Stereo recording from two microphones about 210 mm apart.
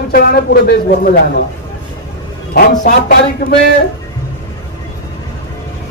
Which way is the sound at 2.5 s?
45° left (ahead or behind).